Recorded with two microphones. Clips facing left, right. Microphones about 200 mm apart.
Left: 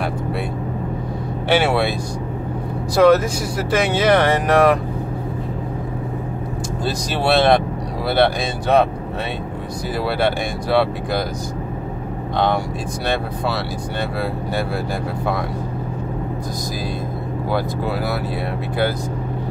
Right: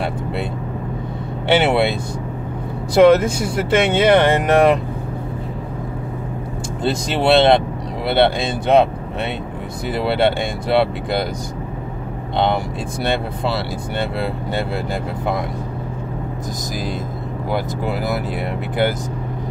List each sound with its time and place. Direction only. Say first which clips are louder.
1.5 s speech: right 2 dB; 25° right (ahead or behind)
6.8 s speech: right 4 dB; 25° right (ahead or behind)
10.0 s speech: right 3 dB; 25° right (ahead or behind)
17.5 s speech: even; 20° right (ahead or behind)